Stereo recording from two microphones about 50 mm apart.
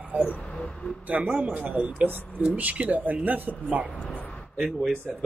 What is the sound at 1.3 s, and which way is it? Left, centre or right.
A man's voice, right.